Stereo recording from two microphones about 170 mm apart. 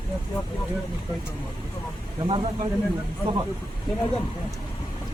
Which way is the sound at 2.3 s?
30° right (ahead or behind).